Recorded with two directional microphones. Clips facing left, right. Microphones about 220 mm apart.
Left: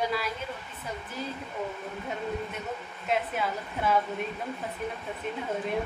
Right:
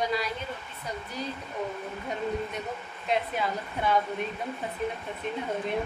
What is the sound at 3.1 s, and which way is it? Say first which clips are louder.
A woman's voice: right 1 dB; 5° left (ahead or behind).